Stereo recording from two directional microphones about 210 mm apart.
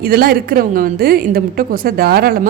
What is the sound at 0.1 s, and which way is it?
A woman's voice, 45° right (ahead or behind).